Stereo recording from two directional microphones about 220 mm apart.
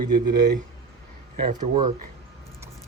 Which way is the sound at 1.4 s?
30° right (ahead or behind).